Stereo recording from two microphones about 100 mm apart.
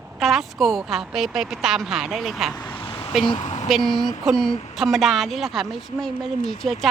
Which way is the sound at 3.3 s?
90° left.